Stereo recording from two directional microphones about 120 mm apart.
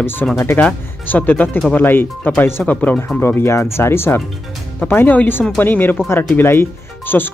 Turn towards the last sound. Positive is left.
turn(degrees=15)  # may be behind; listen again after turning